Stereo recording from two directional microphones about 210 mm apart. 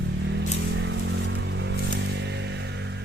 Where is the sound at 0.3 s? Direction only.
60° right (ahead or behind).